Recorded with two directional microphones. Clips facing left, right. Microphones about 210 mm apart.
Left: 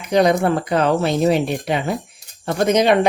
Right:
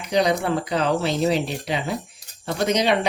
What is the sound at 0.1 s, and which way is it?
A woman's voice, 55° left (ahead or behind).